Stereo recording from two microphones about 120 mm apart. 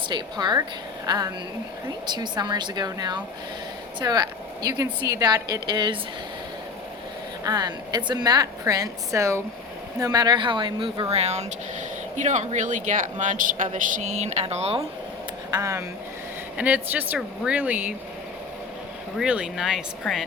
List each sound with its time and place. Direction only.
0.1 s a woman's voice: 35° right (ahead or behind)
7.4 s a woman's voice: 35° right (ahead or behind)
11.1 s speech: 65° right (ahead or behind)
12.1 s speech: 90° right; by 14.4 s 75° right (ahead or behind)
14.5 s speech: 55° right (ahead or behind)
15.4 s speech: 25° right (ahead or behind)
16.6 s speech: 10° right (ahead or behind)
19.1 s speech: 5° right (ahead or behind)